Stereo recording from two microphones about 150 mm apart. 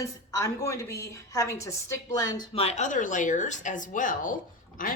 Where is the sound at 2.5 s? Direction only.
45° left (ahead or behind).